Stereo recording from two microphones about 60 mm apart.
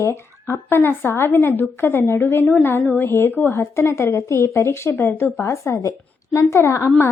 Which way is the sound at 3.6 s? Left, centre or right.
Left.